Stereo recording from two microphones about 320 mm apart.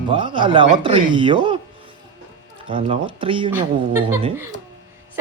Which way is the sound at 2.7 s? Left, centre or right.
Centre.